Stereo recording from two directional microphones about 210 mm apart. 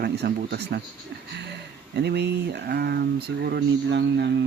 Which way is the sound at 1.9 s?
50° right (ahead or behind).